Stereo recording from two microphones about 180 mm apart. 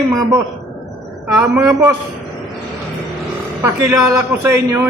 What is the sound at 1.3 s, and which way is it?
Speech, 15° right (ahead or behind).